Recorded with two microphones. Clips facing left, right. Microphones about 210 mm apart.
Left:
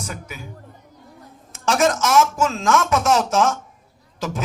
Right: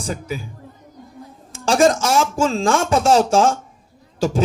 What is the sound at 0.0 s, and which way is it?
Speech, 30° right (ahead or behind).